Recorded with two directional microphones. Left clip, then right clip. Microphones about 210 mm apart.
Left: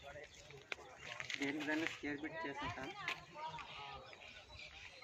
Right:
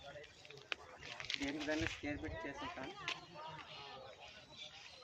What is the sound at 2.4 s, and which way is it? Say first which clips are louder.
Speech: left 2 dB; 55° right (ahead or behind).